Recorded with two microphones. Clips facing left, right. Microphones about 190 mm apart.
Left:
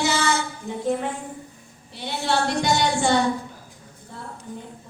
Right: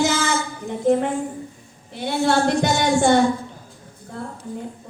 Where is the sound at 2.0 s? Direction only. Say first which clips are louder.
Right 5 dB; 50° right (ahead or behind).